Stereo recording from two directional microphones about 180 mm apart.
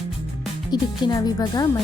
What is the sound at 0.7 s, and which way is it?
Speech, 20° left (ahead or behind).